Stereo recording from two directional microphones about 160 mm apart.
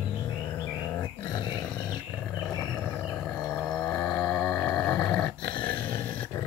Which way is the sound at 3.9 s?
25° left (ahead or behind).